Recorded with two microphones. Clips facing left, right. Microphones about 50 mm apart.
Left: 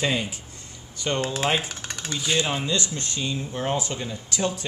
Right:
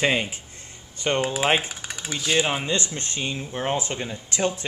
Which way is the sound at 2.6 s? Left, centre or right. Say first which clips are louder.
Even; right.